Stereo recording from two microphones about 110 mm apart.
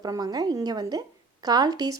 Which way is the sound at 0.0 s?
35° right (ahead or behind).